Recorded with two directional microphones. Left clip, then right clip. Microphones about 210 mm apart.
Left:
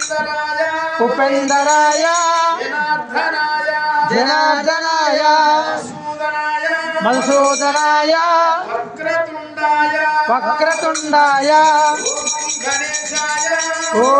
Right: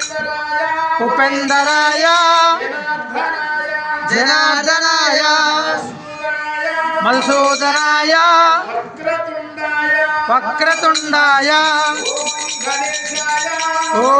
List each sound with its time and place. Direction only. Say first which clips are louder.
1.1 s music: right 1 dB; 35° left (ahead or behind)
4.1 s speech: right 5 dB; 40° left (ahead or behind)
7.0 s speech: even; 35° left (ahead or behind)
10.2 s speech: right 1 dB; 35° left (ahead or behind)